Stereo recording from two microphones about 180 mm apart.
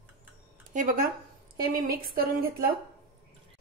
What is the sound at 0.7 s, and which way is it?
A woman's voice, 45° right (ahead or behind).